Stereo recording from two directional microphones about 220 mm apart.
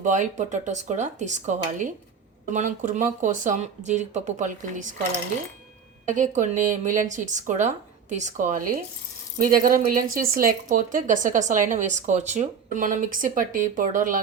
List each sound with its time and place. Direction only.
0.0 s speech: 35° right (ahead or behind)
6.1 s speech: 35° right (ahead or behind)